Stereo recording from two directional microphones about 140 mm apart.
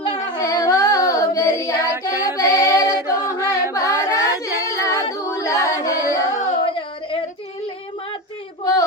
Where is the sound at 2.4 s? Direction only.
25° left (ahead or behind).